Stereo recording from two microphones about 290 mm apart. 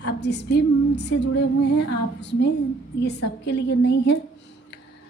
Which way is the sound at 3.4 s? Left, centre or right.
Left.